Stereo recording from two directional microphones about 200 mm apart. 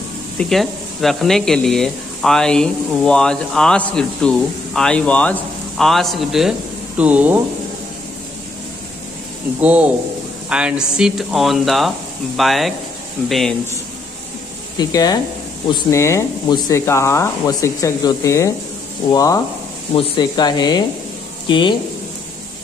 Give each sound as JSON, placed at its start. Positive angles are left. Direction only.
{"t": 0.4, "sound": "speech", "side_deg": 0}
{"t": 9.6, "sound": "speech", "side_deg": -5}
{"t": 14.8, "sound": "speech", "side_deg": 20}